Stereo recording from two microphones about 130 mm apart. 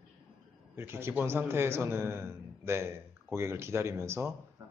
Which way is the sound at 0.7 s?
20° right (ahead or behind).